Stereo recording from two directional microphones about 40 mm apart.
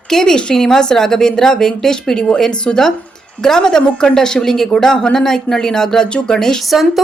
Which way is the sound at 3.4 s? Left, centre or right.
Centre.